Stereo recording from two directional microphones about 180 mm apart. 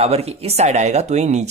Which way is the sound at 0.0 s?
35° right (ahead or behind).